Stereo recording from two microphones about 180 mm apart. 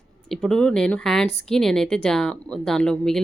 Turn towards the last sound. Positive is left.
turn(degrees=5)  # may be behind; listen again after turning